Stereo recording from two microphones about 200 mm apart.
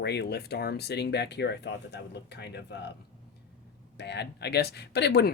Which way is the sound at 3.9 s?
55° left (ahead or behind).